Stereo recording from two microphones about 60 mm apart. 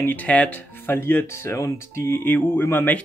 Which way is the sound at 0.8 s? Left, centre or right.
Left.